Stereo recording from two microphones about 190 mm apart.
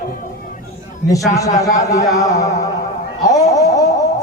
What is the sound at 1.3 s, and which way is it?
A man's voice, 15° left (ahead or behind).